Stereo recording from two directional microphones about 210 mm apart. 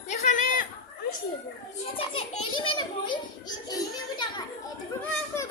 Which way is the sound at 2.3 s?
90° left.